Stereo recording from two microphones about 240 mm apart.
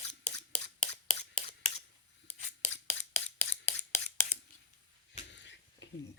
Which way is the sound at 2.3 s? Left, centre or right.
Left.